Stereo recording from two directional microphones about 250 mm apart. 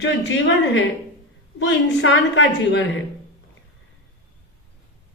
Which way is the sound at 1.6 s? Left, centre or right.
Left.